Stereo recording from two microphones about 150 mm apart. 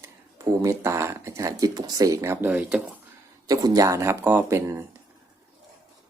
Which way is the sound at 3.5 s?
25° right (ahead or behind).